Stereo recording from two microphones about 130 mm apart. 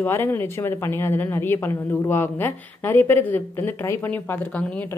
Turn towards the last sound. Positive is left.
turn(degrees=10)  # may be behind; listen again after turning